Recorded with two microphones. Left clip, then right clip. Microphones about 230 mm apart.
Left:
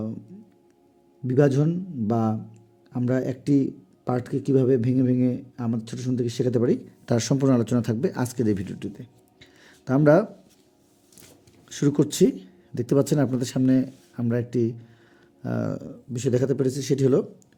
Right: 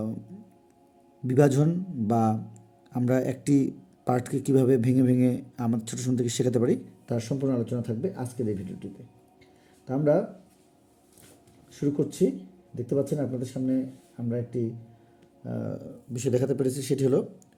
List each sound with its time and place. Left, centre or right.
1.3 s speech: centre
7.0 s speech: left
9.4 s a sound: left
11.7 s speech: left; by 17.2 s centre